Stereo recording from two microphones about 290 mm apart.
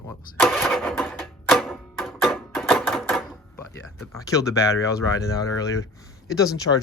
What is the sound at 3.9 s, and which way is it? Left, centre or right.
Speech, centre.